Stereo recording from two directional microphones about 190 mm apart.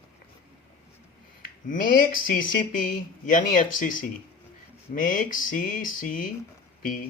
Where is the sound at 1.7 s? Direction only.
45° left (ahead or behind).